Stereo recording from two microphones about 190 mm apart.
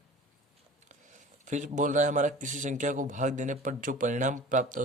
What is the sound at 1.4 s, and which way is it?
Speech, 40° right (ahead or behind).